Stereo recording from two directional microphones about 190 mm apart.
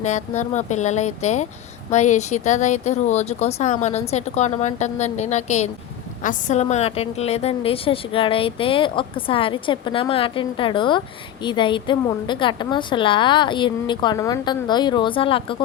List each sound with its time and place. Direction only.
0.0 s a woman's voice: 40° left (ahead or behind)